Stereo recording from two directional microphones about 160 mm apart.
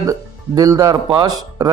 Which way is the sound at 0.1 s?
20° right (ahead or behind).